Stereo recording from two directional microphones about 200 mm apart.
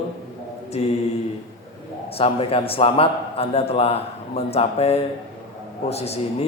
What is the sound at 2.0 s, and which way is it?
A man's voice, 30° left (ahead or behind).